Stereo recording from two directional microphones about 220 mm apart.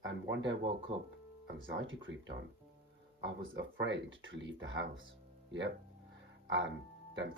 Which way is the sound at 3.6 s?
55° right (ahead or behind).